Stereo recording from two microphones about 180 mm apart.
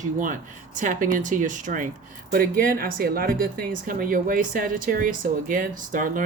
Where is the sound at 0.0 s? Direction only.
45° right (ahead or behind).